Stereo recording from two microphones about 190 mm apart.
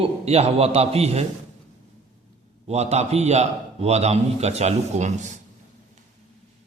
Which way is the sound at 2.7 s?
35° right (ahead or behind).